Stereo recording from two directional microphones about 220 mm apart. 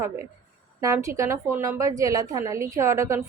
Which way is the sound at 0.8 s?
15° right (ahead or behind).